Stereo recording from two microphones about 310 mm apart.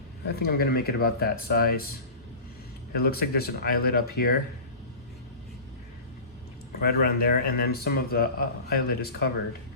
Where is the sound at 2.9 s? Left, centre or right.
Left.